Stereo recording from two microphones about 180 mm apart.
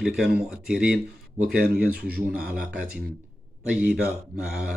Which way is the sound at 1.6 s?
55° right (ahead or behind).